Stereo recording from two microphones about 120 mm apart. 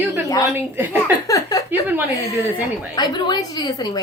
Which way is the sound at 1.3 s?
30° left (ahead or behind).